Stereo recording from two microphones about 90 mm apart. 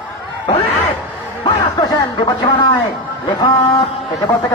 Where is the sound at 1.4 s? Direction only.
55° left (ahead or behind).